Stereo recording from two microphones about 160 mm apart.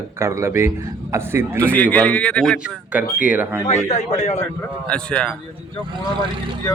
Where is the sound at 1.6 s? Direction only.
10° left (ahead or behind); by 3.6 s 10° right (ahead or behind).